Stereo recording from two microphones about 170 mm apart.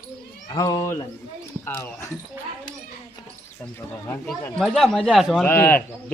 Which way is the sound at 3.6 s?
15° left (ahead or behind).